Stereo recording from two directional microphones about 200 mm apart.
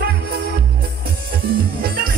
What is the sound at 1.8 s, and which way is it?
Music, 50° right (ahead or behind).